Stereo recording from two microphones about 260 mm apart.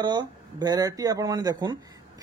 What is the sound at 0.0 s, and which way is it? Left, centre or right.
Speech, centre.